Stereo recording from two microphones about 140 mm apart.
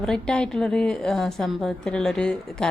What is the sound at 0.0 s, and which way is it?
A woman's voice, 5° left (ahead or behind).